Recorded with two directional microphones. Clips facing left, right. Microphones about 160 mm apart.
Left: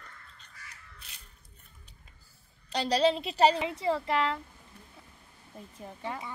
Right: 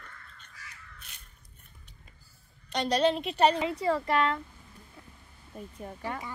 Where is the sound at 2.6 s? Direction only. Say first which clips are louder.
Even; 30° left (ahead or behind).